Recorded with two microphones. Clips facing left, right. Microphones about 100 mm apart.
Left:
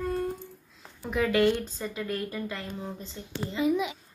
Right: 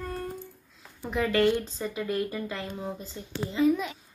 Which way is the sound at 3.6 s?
15° left (ahead or behind).